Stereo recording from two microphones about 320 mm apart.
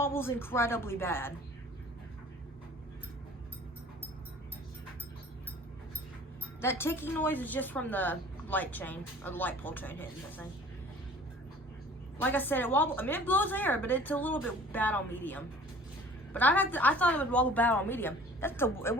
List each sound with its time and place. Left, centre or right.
0.0 s a woman's voice: centre
6.6 s speech: centre
12.2 s speech: centre